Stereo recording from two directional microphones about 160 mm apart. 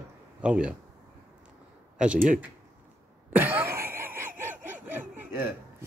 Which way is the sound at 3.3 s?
10° right (ahead or behind).